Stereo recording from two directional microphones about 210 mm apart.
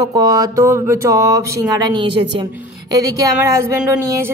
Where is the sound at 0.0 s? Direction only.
15° right (ahead or behind).